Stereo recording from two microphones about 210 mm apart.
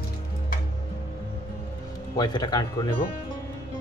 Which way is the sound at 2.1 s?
20° left (ahead or behind).